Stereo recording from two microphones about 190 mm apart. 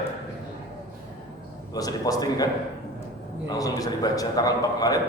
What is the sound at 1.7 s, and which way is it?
Speech, 20° left (ahead or behind).